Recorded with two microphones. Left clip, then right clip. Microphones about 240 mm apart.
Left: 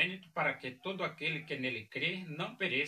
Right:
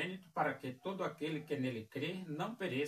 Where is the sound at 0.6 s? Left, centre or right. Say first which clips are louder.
Left 3 dB; centre.